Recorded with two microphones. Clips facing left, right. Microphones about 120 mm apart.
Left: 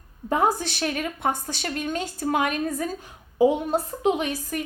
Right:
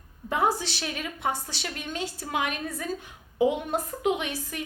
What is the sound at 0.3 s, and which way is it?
A woman's voice, 45° left (ahead or behind).